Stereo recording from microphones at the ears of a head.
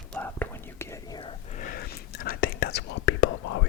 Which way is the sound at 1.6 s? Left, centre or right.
Left.